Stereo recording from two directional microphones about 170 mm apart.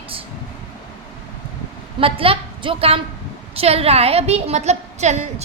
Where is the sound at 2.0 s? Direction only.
35° right (ahead or behind).